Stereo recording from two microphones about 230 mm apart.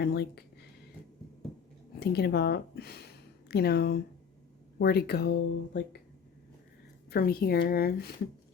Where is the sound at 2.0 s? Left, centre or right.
Left.